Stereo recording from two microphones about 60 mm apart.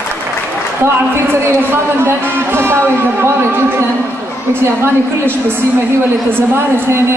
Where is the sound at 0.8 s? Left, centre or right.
Right.